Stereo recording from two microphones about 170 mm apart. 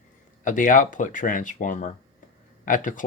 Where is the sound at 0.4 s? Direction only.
50° left (ahead or behind).